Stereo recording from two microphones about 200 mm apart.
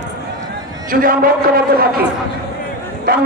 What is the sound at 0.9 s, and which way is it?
Speech, 45° right (ahead or behind).